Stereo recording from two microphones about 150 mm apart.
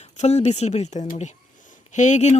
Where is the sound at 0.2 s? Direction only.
45° left (ahead or behind).